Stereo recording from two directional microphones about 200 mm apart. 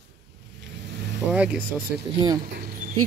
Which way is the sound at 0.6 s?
60° right (ahead or behind).